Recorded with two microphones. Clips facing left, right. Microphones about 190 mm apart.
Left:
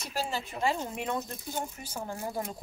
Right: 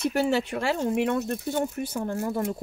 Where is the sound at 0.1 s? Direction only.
70° right (ahead or behind).